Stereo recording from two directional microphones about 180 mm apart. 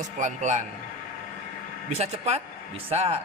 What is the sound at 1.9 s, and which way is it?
Speech, 35° right (ahead or behind).